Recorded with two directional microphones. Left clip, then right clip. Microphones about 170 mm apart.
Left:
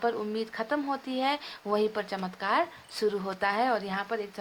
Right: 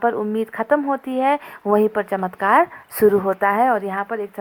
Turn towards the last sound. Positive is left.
turn(degrees=-40)  # may be behind; listen again after turning